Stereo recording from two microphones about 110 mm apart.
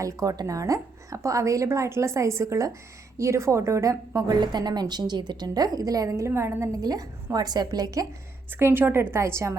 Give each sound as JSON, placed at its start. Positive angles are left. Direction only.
{"t": 0.0, "sound": "a woman's voice", "side_deg": -30}
{"t": 8.5, "sound": "a woman's voice", "side_deg": -20}